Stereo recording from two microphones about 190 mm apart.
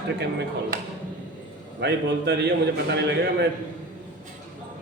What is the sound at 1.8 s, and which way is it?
Speech, 60° right (ahead or behind).